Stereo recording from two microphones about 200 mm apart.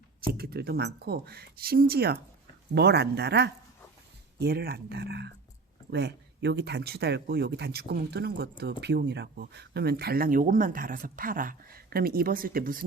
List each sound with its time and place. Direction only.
0.3 s speech: 50° right (ahead or behind)